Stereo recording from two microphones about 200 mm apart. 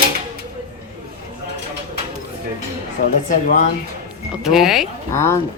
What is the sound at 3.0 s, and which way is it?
Speech, 45° left (ahead or behind).